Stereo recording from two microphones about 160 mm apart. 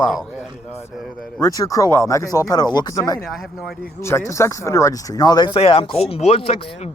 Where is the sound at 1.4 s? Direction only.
20° left (ahead or behind).